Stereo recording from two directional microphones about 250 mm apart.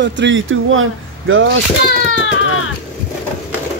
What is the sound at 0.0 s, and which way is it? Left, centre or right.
Speech, right.